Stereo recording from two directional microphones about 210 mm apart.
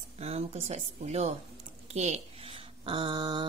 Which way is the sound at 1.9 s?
30° right (ahead or behind).